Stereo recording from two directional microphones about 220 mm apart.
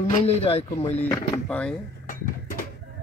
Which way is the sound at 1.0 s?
5° left (ahead or behind).